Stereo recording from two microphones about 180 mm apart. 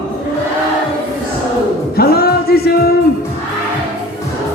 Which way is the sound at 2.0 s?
60° left (ahead or behind).